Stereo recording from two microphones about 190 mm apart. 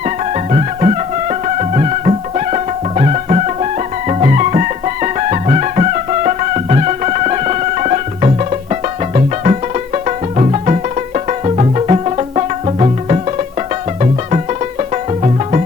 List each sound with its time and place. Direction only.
0.5 s music: 35° right (ahead or behind)